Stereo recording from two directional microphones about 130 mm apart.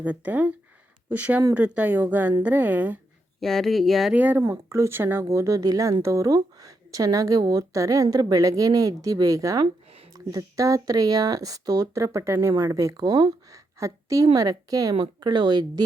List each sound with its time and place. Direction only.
0.0 s speech: 10° right (ahead or behind)
3.4 s speech: centre (ahead or behind)
4.1 s speech: 10° right (ahead or behind); by 15.8 s 35° right (ahead or behind)